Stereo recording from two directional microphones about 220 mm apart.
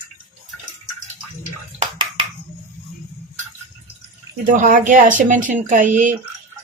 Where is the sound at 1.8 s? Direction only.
25° right (ahead or behind).